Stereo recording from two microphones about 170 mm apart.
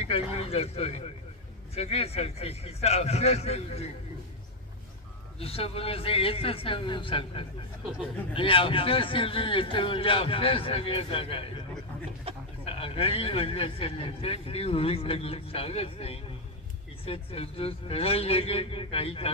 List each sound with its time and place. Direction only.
0.3 s speech: 35° left (ahead or behind)
5.4 s speech: 35° left (ahead or behind)
12.6 s speech: 35° left (ahead or behind)